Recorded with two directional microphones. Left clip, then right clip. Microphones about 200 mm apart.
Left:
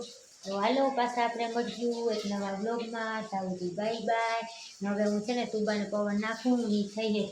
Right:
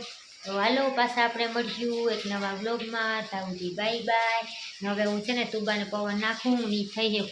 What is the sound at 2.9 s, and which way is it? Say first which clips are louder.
A woman's voice: right 4 dB; 5° right (ahead or behind).